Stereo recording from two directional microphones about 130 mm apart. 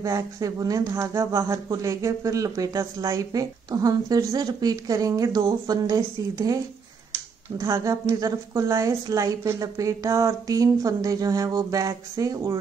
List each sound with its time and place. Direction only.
0.0 s speech: 25° right (ahead or behind)